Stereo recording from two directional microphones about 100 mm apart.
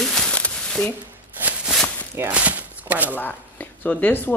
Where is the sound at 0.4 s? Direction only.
15° left (ahead or behind).